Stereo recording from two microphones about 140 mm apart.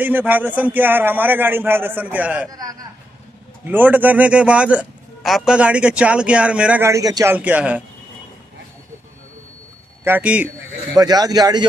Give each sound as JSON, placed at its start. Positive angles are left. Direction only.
{"t": 0.0, "sound": "speech", "side_deg": -15}
{"t": 2.5, "sound": "speech", "side_deg": -25}
{"t": 3.6, "sound": "speech", "side_deg": -15}
{"t": 6.9, "sound": "speech", "side_deg": -25}
{"t": 7.3, "sound": "speech", "side_deg": -10}
{"t": 10.0, "sound": "speech", "side_deg": -10}
{"t": 11.0, "sound": "speech", "side_deg": -25}